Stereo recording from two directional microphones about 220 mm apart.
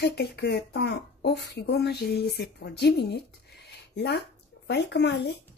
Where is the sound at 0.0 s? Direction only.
45° left (ahead or behind).